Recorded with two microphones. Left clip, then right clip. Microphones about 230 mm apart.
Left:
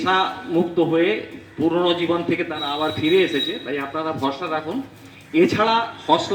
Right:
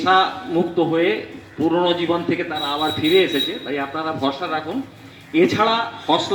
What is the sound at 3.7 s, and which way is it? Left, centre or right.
A woman's voice, left.